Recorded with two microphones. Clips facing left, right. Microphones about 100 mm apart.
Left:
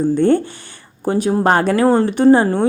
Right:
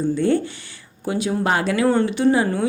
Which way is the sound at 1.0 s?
40° left (ahead or behind).